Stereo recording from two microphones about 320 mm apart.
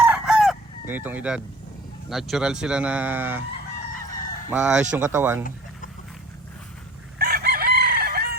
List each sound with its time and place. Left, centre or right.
0.0 s chicken: centre
2.0 s speech: centre
4.5 s speech: centre
7.2 s chicken: right